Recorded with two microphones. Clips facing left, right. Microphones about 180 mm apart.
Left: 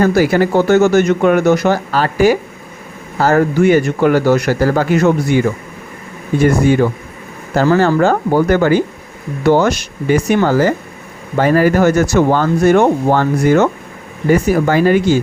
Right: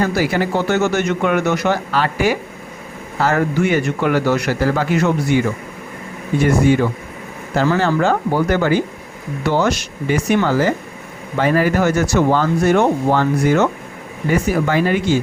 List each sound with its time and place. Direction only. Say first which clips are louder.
0.0 s speech: left 6 dB; 45° left (ahead or behind)
7.5 s speech: left 5 dB; 40° left (ahead or behind)